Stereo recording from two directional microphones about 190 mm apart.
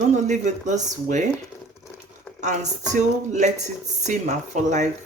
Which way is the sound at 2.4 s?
40° right (ahead or behind).